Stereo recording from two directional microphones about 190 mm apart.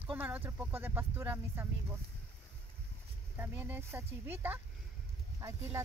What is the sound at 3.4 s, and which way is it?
Speech, 10° right (ahead or behind).